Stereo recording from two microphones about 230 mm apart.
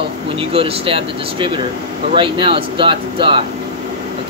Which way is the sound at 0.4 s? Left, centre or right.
Right.